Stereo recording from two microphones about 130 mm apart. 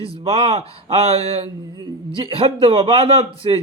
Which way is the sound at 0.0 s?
45° right (ahead or behind).